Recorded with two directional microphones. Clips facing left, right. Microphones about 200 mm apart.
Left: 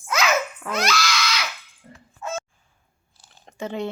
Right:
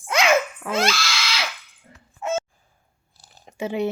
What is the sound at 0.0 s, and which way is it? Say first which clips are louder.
Babbling: right 3 dB; 25° right (ahead or behind).